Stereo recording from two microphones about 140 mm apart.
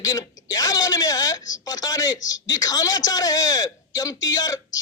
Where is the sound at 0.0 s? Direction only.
25° left (ahead or behind).